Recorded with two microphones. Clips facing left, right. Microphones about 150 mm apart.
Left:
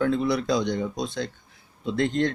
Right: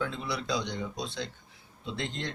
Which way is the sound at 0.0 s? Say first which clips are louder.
Left 11 dB; 55° left (ahead or behind).